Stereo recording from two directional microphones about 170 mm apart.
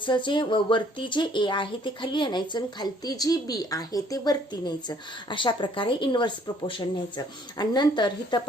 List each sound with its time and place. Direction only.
0.0 s speech: 30° left (ahead or behind)